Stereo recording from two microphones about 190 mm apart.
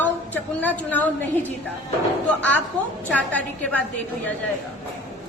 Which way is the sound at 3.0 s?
10° left (ahead or behind).